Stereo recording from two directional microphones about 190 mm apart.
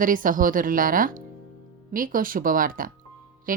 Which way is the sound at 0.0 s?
45° right (ahead or behind).